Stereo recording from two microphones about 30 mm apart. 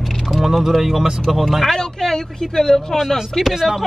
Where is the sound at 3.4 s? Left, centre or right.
Centre.